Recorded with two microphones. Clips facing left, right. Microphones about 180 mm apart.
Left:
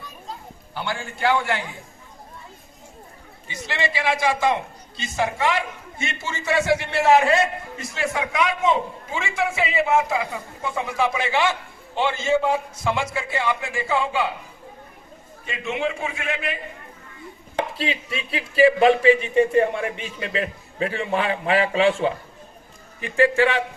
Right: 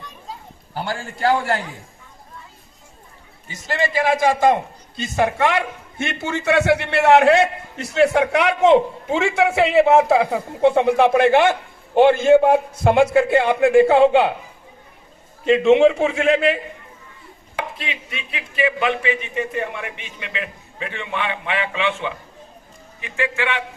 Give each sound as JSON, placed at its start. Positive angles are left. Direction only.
{"t": 0.7, "sound": "a man's voice", "side_deg": -40}
{"t": 3.5, "sound": "a man's voice", "side_deg": -45}
{"t": 15.4, "sound": "a man's voice", "side_deg": -70}
{"t": 17.7, "sound": "a man's voice", "side_deg": 35}